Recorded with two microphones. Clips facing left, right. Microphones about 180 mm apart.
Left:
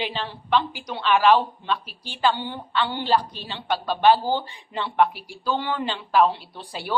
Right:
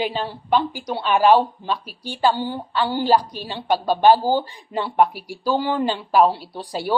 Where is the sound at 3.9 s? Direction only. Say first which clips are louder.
Right 3 dB; 40° right (ahead or behind).